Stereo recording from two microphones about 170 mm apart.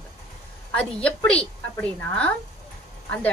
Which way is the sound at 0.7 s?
5° left (ahead or behind).